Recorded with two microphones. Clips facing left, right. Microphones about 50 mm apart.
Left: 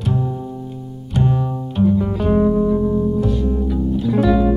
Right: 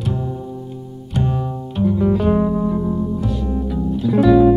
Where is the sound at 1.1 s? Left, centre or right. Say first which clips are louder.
Left 2 dB; centre.